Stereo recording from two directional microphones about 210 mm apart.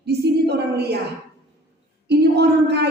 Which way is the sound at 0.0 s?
50° right (ahead or behind).